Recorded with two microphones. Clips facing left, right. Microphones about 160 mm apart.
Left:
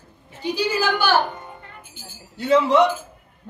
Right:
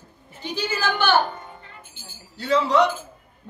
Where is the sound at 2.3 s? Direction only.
20° left (ahead or behind).